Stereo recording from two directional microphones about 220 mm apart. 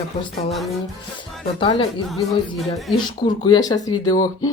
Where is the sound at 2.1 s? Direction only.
Centre (ahead or behind).